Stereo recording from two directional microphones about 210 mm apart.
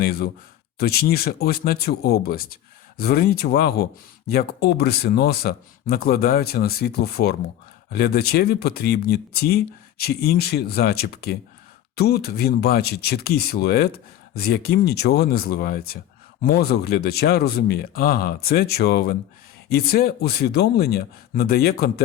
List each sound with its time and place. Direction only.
0.0 s speech: 45° left (ahead or behind)